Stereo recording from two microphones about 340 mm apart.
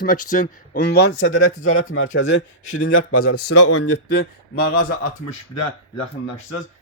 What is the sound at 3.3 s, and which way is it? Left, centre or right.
Speech, left.